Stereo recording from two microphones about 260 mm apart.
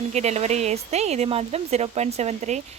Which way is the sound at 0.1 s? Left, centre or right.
Right.